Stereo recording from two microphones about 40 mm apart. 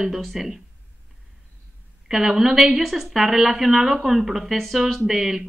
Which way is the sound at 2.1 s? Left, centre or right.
Centre.